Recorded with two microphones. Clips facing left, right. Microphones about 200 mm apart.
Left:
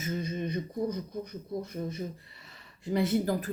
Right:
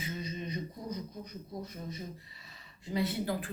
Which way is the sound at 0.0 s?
50° left (ahead or behind).